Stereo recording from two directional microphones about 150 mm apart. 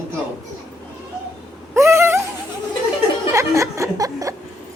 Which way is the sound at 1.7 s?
20° right (ahead or behind).